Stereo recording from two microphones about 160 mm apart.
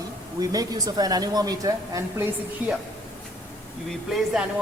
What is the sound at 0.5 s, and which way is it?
A woman's voice, 25° right (ahead or behind).